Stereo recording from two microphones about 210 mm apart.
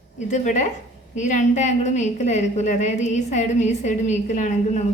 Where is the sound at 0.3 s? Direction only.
35° left (ahead or behind).